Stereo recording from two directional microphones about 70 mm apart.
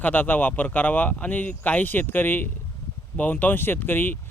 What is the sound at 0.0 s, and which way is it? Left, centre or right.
Speech, left.